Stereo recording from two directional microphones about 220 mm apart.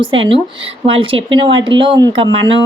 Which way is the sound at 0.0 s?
25° right (ahead or behind).